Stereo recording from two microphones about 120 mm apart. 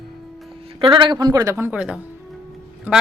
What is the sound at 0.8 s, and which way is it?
Speech, 40° right (ahead or behind).